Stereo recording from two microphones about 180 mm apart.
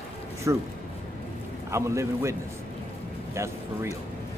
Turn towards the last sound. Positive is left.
turn(degrees=-15)  # may be behind; listen again after turning